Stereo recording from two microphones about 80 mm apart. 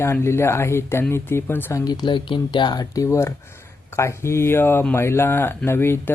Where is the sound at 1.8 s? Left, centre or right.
Left.